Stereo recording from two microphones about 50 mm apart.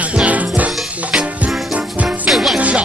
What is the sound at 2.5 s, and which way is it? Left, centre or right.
Music, right.